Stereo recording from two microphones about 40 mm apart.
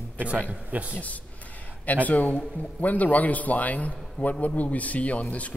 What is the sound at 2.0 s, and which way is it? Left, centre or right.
A man's voice, left.